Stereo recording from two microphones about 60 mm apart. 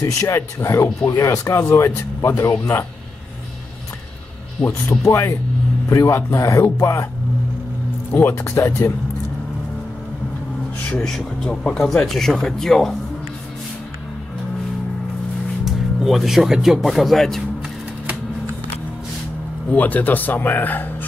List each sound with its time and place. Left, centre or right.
0.0 s speech: left
5.0 s speech: left
8.2 s speech: left
11.1 s speech: centre
15.6 s speech: centre
19.7 s speech: left